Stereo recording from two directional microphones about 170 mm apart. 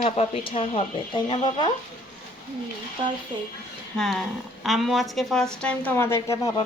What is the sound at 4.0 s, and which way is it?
Speech, centre (ahead or behind).